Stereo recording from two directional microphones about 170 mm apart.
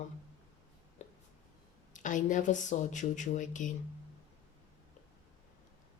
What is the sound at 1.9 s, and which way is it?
Speech, 50° left (ahead or behind).